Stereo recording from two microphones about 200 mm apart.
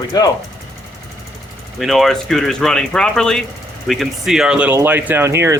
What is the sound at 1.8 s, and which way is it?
Speech, centre (ahead or behind).